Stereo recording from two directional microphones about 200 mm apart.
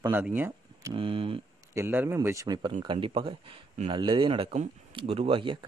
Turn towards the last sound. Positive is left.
turn(degrees=-25)  # may be behind; listen again after turning